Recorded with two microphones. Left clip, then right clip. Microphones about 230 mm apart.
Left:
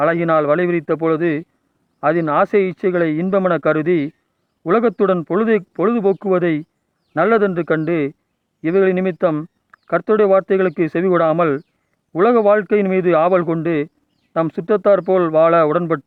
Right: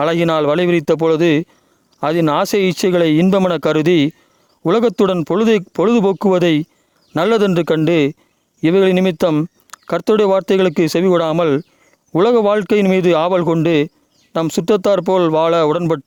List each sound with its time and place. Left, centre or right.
0.0 s speech: right